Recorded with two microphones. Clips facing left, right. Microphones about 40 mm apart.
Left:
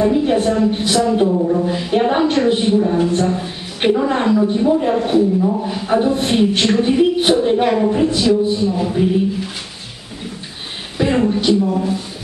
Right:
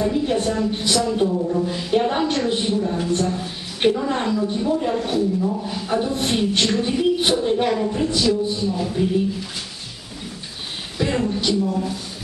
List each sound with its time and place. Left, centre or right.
0.0 s a woman's voice: centre
11.0 s speech: left